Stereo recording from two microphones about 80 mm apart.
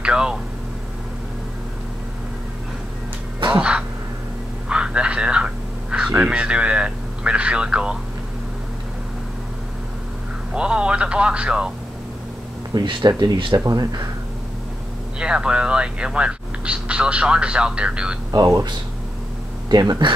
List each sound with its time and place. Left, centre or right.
0.0 s a sound: centre
4.6 s radio: centre
10.5 s speech: centre
12.7 s speech: right
13.7 s speech: right
15.1 s speech: centre
18.3 s speech: right
19.7 s speech: right